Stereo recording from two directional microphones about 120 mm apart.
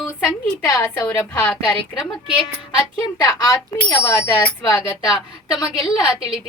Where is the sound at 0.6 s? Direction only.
25° left (ahead or behind).